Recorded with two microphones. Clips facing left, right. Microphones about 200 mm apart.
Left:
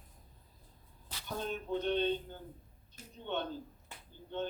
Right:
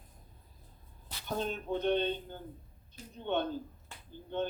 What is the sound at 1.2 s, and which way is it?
Speech, 55° right (ahead or behind).